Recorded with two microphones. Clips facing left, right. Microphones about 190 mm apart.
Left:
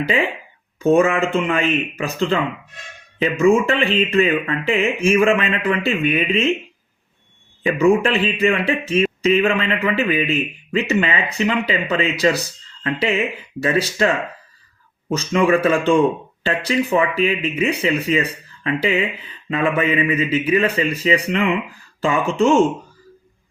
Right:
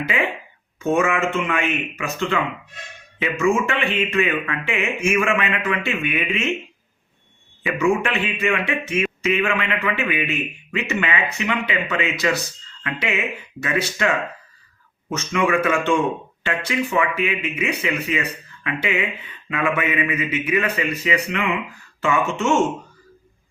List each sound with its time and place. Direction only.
0.8 s speech: 35° left (ahead or behind)
7.6 s a man's voice: 35° left (ahead or behind)
15.1 s speech: 35° left (ahead or behind)